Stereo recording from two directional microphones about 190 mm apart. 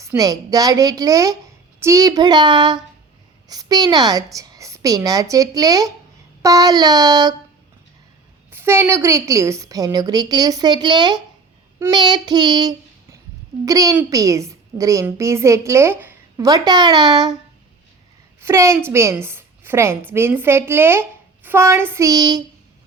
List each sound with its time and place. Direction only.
0.0 s a woman's voice: 15° right (ahead or behind)
8.5 s a woman's voice: 15° right (ahead or behind)
11.8 s child singing: 20° right (ahead or behind)
13.7 s a woman's voice: 20° right (ahead or behind)
18.3 s a woman's voice: 15° right (ahead or behind)